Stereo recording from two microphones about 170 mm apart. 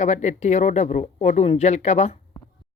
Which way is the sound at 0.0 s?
40° left (ahead or behind).